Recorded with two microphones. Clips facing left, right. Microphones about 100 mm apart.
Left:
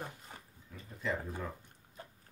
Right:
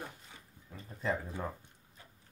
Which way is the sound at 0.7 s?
30° right (ahead or behind).